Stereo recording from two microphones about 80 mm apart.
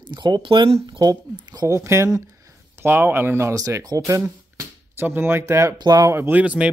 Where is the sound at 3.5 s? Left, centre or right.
Right.